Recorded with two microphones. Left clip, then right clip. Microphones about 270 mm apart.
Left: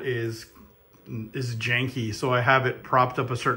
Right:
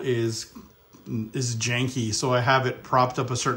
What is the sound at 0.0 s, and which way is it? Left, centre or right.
Speech, centre.